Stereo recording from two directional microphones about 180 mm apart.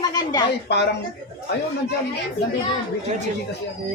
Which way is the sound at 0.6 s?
65° left (ahead or behind).